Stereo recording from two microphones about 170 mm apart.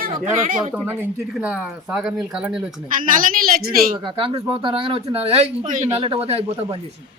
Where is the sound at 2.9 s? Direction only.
55° right (ahead or behind).